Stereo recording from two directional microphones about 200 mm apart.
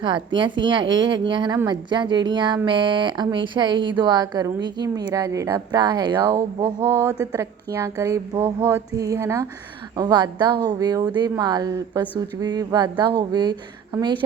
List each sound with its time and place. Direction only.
0.6 s speech: 25° right (ahead or behind)